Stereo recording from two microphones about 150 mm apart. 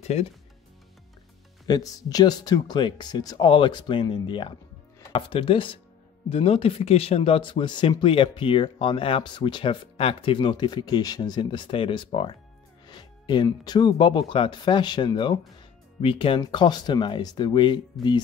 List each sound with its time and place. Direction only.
0.0 s speech: 45° left (ahead or behind)
1.7 s speech: 25° left (ahead or behind)
17.9 s music: centre (ahead or behind)